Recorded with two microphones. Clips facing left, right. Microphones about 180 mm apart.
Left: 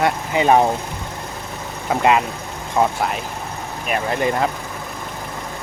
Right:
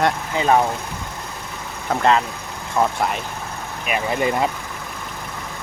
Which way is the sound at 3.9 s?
5° right (ahead or behind).